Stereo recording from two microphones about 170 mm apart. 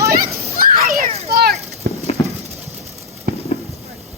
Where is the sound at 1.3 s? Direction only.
65° right (ahead or behind).